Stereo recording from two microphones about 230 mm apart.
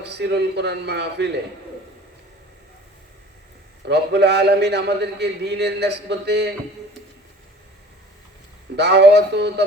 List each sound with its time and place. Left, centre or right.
0.0 s a man's voice: right
3.8 s a man's voice: right
8.7 s a man's voice: right